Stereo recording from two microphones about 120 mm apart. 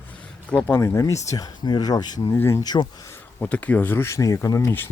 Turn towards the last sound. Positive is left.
turn(degrees=20)  # may be behind; listen again after turning